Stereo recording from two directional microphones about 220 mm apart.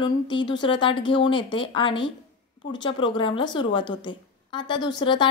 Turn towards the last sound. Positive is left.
turn(degrees=20)  # may be behind; listen again after turning